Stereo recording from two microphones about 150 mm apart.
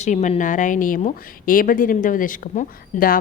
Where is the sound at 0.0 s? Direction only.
55° left (ahead or behind).